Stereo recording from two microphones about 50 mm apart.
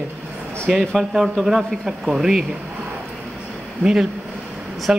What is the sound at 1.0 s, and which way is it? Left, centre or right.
Speech, centre.